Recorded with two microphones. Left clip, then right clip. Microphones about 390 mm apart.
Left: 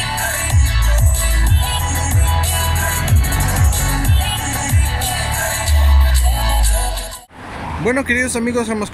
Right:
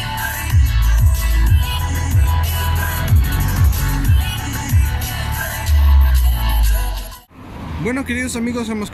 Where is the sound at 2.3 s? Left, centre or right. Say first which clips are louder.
Left 4 dB; centre.